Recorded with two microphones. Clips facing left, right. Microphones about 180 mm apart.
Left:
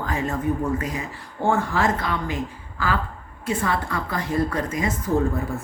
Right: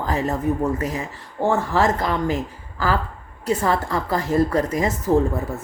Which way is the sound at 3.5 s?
40° right (ahead or behind).